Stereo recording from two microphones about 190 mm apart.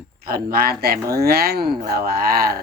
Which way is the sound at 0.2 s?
50° right (ahead or behind).